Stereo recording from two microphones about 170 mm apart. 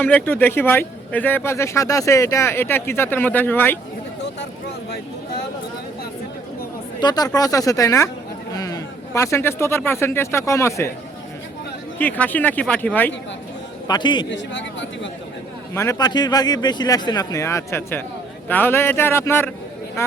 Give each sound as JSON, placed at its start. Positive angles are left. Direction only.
{"t": 0.0, "sound": "speech", "side_deg": 10}
{"t": 7.0, "sound": "speech", "side_deg": 25}
{"t": 11.9, "sound": "speech", "side_deg": 10}
{"t": 13.8, "sound": "speech", "side_deg": 25}
{"t": 14.3, "sound": "a sound", "side_deg": 90}
{"t": 15.7, "sound": "speech", "side_deg": 15}